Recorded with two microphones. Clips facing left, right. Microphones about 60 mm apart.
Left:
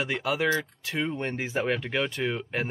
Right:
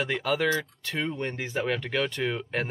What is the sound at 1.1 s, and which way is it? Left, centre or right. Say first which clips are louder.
Speech: left 1 dB; centre.